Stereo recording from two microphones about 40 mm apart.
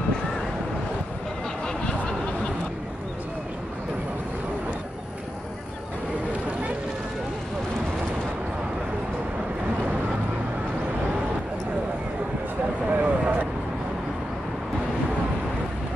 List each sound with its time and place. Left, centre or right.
12.9 s vehicle: right